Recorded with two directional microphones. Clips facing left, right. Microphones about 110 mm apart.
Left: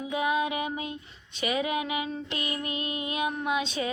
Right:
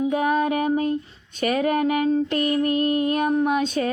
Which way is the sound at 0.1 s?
45° right (ahead or behind).